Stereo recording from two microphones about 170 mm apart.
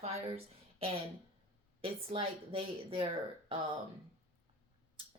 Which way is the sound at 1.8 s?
35° right (ahead or behind).